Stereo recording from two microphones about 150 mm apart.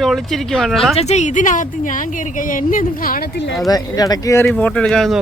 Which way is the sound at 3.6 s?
25° left (ahead or behind).